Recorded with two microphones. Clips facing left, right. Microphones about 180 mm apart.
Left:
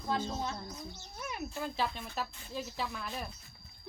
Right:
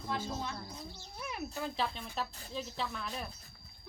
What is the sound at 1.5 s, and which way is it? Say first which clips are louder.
Speech: left 1 dB; centre (ahead or behind).